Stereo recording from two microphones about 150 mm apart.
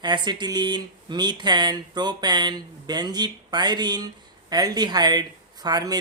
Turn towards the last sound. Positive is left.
turn(degrees=-25)  # may be behind; listen again after turning